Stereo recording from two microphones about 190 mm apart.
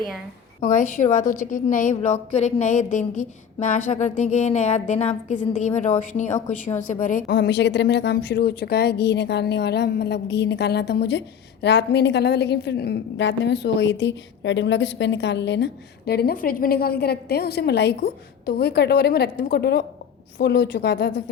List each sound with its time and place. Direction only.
0.6 s a woman's voice: 40° left (ahead or behind)
7.3 s a woman's voice: 60° left (ahead or behind)